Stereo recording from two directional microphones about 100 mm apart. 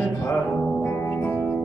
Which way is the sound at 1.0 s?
20° left (ahead or behind).